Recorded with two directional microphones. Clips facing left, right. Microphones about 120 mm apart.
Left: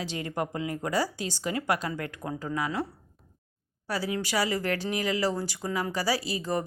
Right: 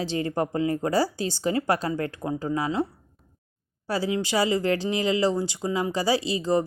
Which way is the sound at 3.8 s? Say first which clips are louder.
Right 5 dB; 25° right (ahead or behind).